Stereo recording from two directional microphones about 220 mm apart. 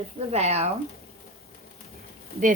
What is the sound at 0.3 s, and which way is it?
Speech, 30° right (ahead or behind).